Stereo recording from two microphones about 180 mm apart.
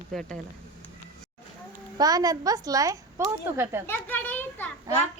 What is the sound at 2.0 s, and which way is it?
A woman's voice, 20° right (ahead or behind).